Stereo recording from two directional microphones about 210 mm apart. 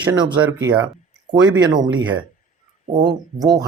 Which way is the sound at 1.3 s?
20° right (ahead or behind).